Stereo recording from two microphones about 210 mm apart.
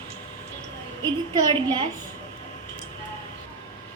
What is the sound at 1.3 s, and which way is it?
Speech, 20° right (ahead or behind).